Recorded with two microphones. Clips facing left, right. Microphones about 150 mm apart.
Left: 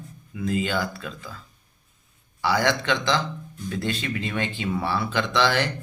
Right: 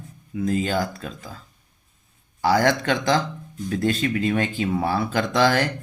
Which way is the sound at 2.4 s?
45° right (ahead or behind).